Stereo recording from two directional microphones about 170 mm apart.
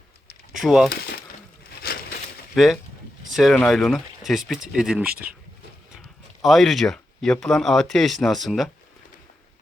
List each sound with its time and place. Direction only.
0.6 s speech: centre (ahead or behind)
1.8 s crushing: 65° left (ahead or behind)
3.3 s speech: centre (ahead or behind)
6.4 s speech: centre (ahead or behind)